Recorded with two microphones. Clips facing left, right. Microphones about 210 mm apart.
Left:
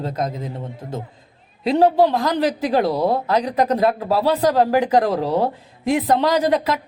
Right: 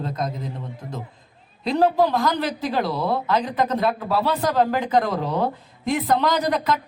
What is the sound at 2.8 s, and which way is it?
Speech, 40° left (ahead or behind).